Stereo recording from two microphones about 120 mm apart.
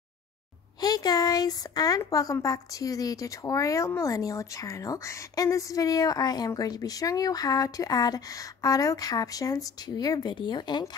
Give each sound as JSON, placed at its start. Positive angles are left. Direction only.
{"t": 0.7, "sound": "speech", "side_deg": 35}